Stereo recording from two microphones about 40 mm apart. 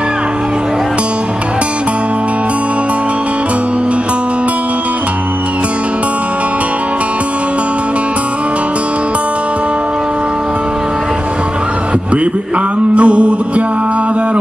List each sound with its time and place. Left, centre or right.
12.9 s music: right